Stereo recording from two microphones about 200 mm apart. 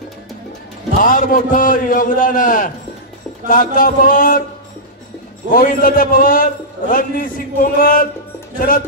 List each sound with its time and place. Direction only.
1.0 s a man's voice: 40° left (ahead or behind)
5.5 s a man's voice: 45° left (ahead or behind)